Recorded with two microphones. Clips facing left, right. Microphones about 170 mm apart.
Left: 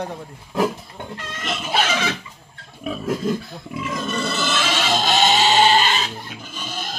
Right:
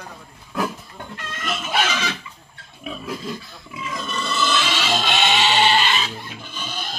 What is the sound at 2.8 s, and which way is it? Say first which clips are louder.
Pig: left 7 dB; 45° left (ahead or behind).